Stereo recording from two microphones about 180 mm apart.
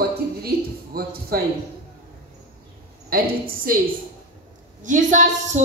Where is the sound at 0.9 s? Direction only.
60° right (ahead or behind).